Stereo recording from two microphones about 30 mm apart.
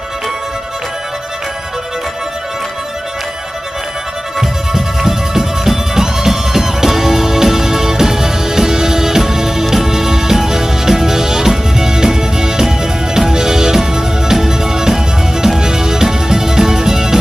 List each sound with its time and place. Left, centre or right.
4.4 s music: centre